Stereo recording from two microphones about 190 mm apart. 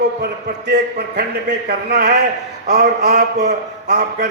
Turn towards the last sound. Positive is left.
turn(degrees=-60)  # may be behind; listen again after turning